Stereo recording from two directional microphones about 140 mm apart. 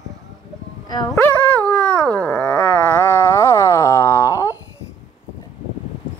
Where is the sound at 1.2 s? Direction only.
10° left (ahead or behind).